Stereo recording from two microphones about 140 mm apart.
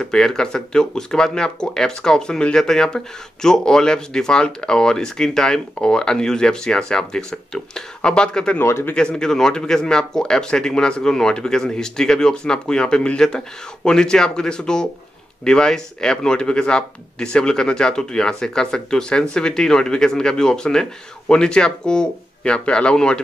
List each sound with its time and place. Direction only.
0.0 s speech: 5° left (ahead or behind)
8.5 s speech: 15° left (ahead or behind)
8.9 s speech: 5° left (ahead or behind)